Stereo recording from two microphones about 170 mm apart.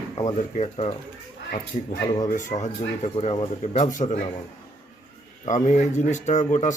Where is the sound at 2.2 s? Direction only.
50° left (ahead or behind).